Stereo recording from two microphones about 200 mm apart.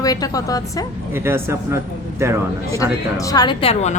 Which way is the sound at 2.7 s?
15° left (ahead or behind).